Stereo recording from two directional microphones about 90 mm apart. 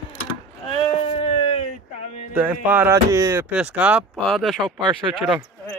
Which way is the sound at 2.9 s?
35° right (ahead or behind).